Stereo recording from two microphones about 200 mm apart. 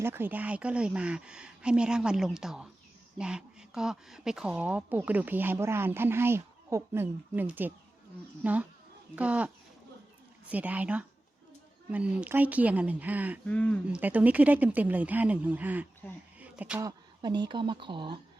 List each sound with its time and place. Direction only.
0.0 s a woman's voice: 10° right (ahead or behind)
10.5 s a woman's voice: 10° right (ahead or behind)
13.5 s speech: 5° left (ahead or behind)
13.8 s a woman's voice: 5° right (ahead or behind)
16.4 s a sound: 5° right (ahead or behind)
16.8 s speech: 20° right (ahead or behind)